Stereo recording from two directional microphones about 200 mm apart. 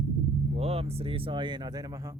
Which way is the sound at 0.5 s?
30° right (ahead or behind).